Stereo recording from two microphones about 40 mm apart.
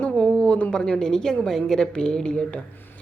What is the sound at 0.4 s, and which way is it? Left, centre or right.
A woman's voice, left.